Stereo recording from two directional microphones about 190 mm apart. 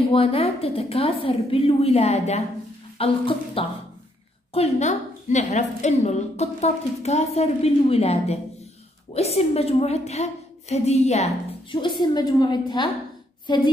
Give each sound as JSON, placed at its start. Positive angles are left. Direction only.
{"t": 0.1, "sound": "a woman's voice", "side_deg": 30}
{"t": 11.7, "sound": "a woman's voice", "side_deg": 25}